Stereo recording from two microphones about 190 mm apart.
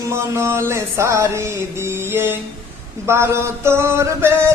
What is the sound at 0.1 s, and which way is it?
Speech, 15° right (ahead or behind).